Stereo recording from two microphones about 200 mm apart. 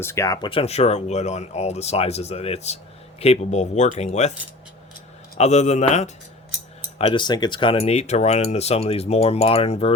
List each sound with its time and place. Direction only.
0.0 s speech: 15° left (ahead or behind); by 4.4 s 35° left (ahead or behind)
5.4 s speech: 35° left (ahead or behind)
7.0 s speech: 25° left (ahead or behind)